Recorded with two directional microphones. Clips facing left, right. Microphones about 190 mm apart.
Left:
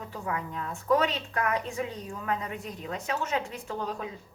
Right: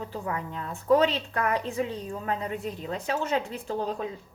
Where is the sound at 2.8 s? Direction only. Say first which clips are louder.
Right 2 dB; 35° right (ahead or behind).